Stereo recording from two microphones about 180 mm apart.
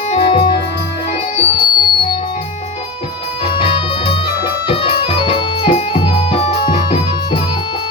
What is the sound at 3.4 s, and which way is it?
Music, 30° left (ahead or behind).